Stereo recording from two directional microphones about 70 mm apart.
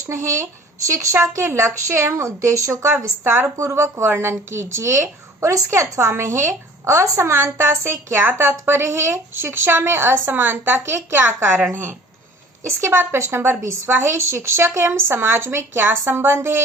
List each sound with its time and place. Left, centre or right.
0.0 s a woman's voice: right